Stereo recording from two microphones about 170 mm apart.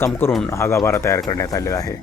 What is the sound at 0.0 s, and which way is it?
Speech, 15° left (ahead or behind).